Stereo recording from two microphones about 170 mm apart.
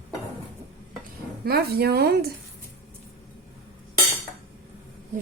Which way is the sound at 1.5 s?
65° right (ahead or behind).